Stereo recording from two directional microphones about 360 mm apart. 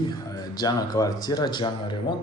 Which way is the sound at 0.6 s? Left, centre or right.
Centre.